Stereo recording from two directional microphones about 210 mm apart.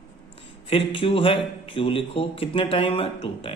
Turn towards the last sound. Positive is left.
turn(degrees=25)  # may be behind; listen again after turning